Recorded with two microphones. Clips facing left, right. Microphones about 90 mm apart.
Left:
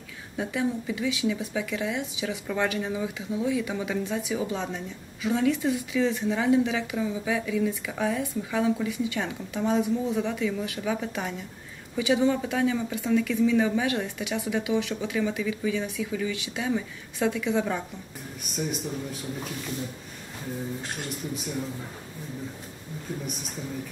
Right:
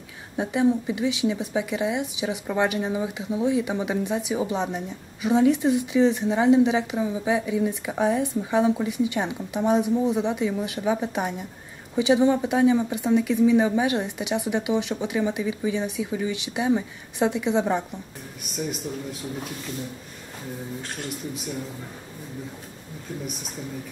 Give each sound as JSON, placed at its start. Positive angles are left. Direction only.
{"t": 0.4, "sound": "speech", "side_deg": -20}